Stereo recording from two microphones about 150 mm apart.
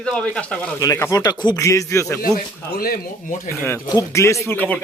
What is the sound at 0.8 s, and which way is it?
Speech, 20° left (ahead or behind).